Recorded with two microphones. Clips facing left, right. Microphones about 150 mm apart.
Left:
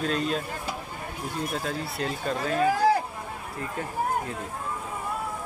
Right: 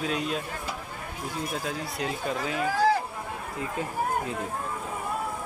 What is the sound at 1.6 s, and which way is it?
Speech, 15° right (ahead or behind).